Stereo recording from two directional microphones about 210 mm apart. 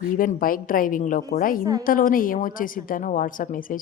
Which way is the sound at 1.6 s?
15° right (ahead or behind).